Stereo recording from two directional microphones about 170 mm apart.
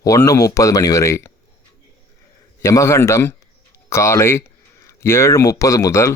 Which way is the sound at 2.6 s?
20° left (ahead or behind).